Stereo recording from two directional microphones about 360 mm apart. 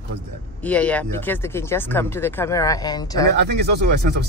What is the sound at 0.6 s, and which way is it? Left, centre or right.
Speech, centre.